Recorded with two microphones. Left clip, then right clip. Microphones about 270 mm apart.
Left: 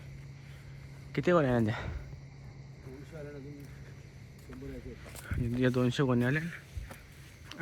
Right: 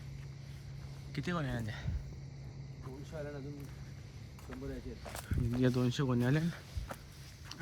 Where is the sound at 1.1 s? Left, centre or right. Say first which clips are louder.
Left 12 dB; centre.